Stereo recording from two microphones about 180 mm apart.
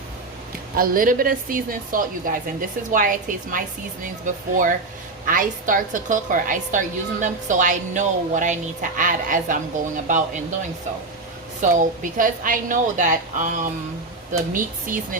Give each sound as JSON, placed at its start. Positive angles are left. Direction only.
{"t": 0.8, "sound": "a woman's voice", "side_deg": -50}
{"t": 11.6, "sound": "a woman's voice", "side_deg": -45}